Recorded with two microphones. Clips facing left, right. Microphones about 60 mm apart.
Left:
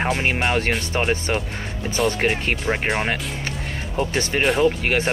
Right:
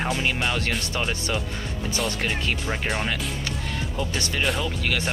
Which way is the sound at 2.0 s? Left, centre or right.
Left.